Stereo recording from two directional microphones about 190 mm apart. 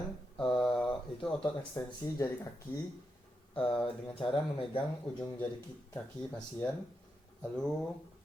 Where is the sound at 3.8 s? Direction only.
30° left (ahead or behind).